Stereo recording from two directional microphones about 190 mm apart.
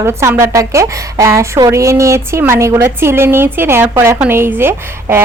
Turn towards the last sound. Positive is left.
turn(degrees=-10)  # may be behind; listen again after turning